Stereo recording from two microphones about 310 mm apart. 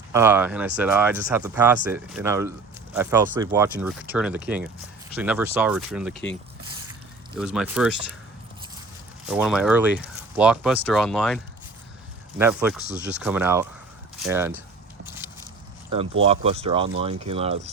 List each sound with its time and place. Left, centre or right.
0.1 s speech: centre
7.3 s speech: centre
9.2 s speech: centre
12.4 s speech: centre
15.0 s biting: centre
16.2 s speech: centre